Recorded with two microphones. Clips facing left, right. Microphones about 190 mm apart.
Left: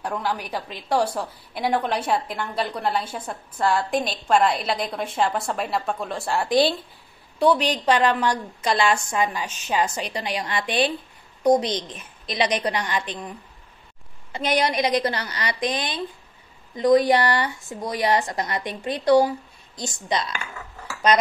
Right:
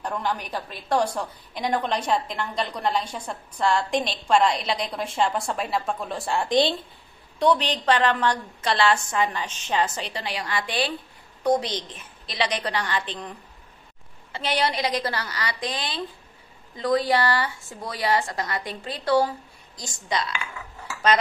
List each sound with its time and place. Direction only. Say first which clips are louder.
0.0 s a woman's voice: left 1 dB; 10° left (ahead or behind)
14.3 s a woman's voice: left 3 dB; 15° left (ahead or behind)